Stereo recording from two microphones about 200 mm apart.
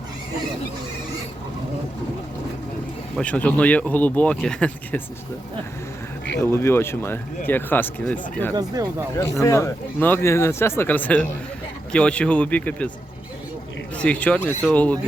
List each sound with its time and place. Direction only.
3.2 s speech: 5° left (ahead or behind)
6.4 s speech: 10° left (ahead or behind)
8.5 s speech: 20° right (ahead or behind)
9.4 s speech: 15° left (ahead or behind)
13.9 s speech: 5° left (ahead or behind)